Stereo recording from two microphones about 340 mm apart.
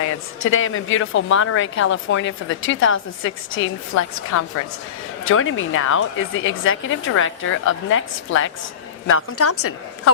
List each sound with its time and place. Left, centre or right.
0.4 s a woman's voice: left